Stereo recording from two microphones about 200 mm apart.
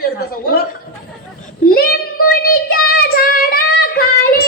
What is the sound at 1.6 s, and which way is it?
Child singing, 45° left (ahead or behind).